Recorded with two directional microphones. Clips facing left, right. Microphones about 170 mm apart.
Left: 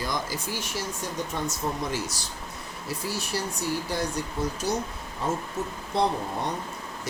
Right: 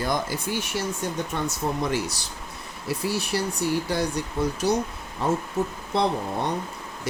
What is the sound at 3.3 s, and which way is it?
Speech, 65° right (ahead or behind).